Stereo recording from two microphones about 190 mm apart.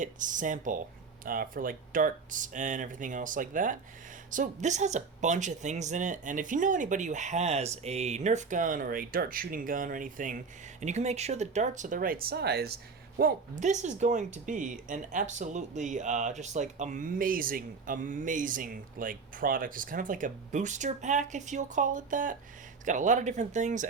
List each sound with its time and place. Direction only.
0.0 s speech: 45° right (ahead or behind)